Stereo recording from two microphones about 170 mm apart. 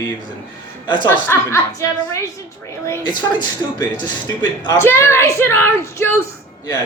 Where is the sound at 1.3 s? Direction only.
15° left (ahead or behind).